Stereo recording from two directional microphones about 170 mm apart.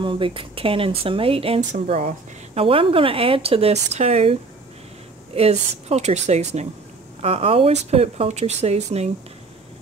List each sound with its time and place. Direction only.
0.0 s speech: 30° right (ahead or behind)